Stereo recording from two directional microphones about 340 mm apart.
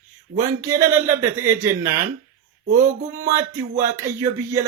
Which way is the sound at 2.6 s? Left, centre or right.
Right.